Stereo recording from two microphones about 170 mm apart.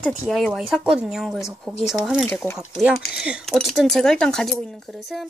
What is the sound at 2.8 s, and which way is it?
Speech, 5° right (ahead or behind).